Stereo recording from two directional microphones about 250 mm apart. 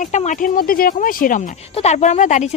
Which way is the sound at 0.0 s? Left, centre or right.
Left.